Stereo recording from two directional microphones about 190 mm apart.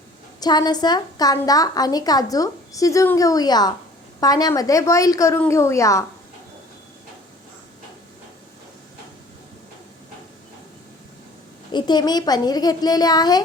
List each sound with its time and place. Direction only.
0.3 s a woman's voice: 20° left (ahead or behind)
11.7 s a woman's voice: 20° left (ahead or behind)